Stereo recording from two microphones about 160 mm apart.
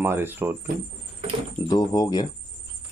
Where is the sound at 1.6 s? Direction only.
25° left (ahead or behind).